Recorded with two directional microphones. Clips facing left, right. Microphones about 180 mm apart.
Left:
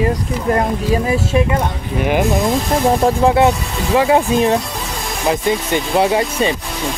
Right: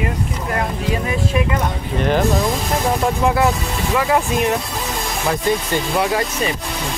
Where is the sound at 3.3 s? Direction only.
25° left (ahead or behind).